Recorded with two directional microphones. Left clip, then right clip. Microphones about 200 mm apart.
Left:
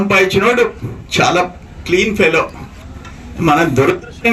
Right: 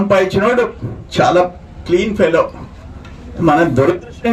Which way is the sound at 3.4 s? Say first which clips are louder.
Even; 15° right (ahead or behind).